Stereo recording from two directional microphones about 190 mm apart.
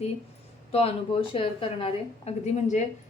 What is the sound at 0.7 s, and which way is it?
A woman's voice, 30° left (ahead or behind).